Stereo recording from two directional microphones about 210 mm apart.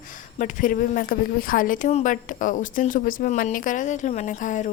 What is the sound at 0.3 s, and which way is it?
Speech, 40° left (ahead or behind).